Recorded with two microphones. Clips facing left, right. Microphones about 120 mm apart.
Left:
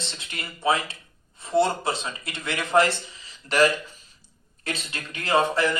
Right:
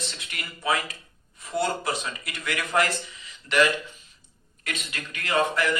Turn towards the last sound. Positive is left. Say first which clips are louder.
# left 2 dB
turn(degrees=30)  # may be behind; listen again after turning